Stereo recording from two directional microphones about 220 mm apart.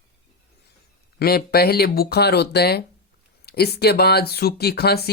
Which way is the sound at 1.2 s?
45° left (ahead or behind).